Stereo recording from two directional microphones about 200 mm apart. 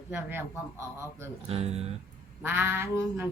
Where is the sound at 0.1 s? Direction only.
10° right (ahead or behind).